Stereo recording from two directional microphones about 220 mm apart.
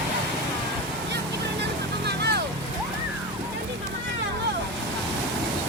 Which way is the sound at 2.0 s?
50° right (ahead or behind).